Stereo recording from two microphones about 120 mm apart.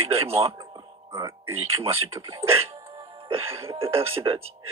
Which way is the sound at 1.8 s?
20° right (ahead or behind).